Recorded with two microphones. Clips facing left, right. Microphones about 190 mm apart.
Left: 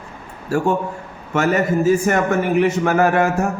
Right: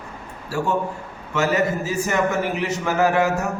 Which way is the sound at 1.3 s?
50° left (ahead or behind).